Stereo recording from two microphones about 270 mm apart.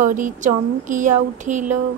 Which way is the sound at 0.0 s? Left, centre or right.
Right.